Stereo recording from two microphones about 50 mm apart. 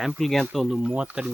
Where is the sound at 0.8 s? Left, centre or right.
Right.